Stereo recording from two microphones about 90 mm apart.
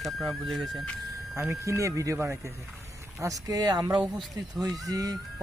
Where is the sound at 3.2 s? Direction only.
50° right (ahead or behind).